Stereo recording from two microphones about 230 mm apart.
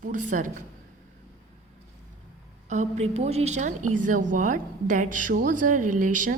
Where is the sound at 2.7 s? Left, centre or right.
Right.